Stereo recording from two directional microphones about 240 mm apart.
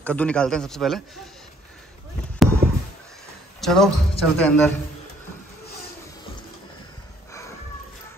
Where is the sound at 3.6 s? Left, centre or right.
Centre.